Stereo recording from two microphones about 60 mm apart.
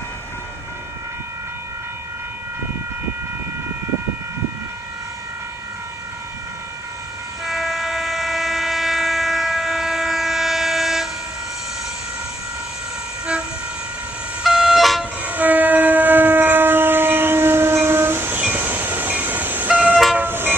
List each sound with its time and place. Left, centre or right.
7.4 s train: centre
14.4 s vehicle: centre
15.2 s train: right
18.4 s train: right
20.2 s vehicle: right